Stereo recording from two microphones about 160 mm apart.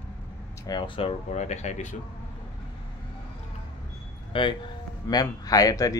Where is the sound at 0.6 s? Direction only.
30° left (ahead or behind); by 1.9 s 50° left (ahead or behind).